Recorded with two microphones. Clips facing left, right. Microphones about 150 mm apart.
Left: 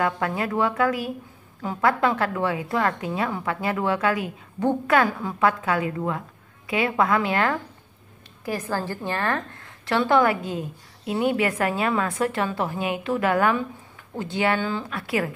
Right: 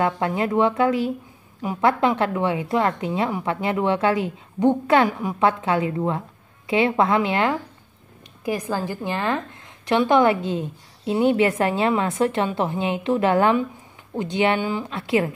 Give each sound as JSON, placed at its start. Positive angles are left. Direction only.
{"t": 0.0, "sound": "a woman's voice", "side_deg": -25}